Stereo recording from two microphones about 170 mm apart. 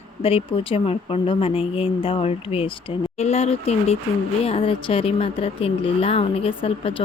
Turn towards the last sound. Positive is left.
turn(degrees=35)  # may be behind; listen again after turning